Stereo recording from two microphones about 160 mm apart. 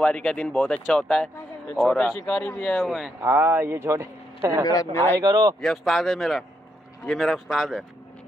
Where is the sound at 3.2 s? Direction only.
15° right (ahead or behind).